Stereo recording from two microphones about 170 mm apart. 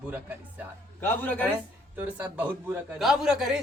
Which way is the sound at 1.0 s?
10° left (ahead or behind).